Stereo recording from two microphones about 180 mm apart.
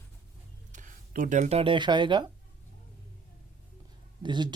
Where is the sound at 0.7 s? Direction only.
45° right (ahead or behind); by 2.2 s 25° right (ahead or behind).